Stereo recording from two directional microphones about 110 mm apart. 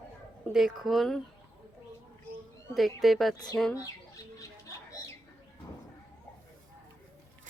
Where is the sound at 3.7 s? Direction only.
30° left (ahead or behind).